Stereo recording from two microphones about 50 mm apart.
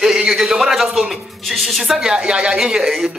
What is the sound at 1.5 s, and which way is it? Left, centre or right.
Speech, centre.